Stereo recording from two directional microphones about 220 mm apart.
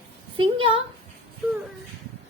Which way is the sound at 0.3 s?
25° right (ahead or behind).